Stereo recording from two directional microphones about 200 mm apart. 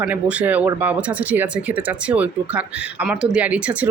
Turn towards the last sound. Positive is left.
turn(degrees=-5)  # may be behind; listen again after turning